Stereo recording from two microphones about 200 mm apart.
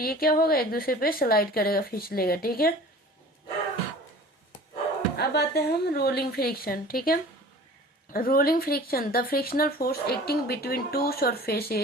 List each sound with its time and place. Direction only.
0.0 s speech: 50° left (ahead or behind)
5.1 s speech: 55° left (ahead or behind)